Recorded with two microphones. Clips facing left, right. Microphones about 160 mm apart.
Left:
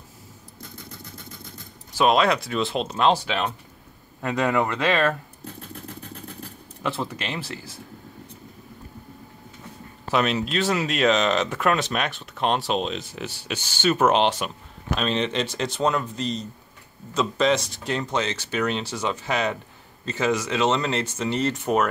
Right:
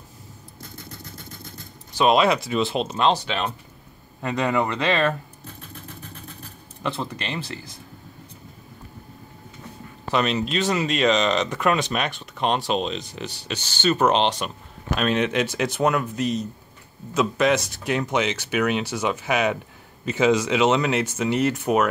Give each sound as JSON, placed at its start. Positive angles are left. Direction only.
{"t": 2.0, "sound": "speech", "side_deg": 0}
{"t": 6.8, "sound": "speech", "side_deg": 5}
{"t": 10.1, "sound": "speech", "side_deg": 5}
{"t": 15.0, "sound": "speech", "side_deg": -5}